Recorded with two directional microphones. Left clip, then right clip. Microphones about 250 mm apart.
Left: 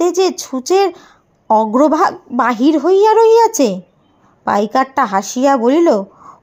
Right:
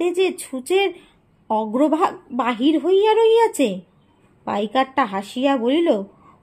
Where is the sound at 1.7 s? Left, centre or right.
Left.